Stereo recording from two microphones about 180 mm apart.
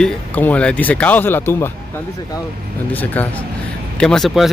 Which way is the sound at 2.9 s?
10° left (ahead or behind).